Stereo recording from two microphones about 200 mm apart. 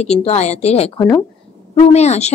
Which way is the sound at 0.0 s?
30° left (ahead or behind).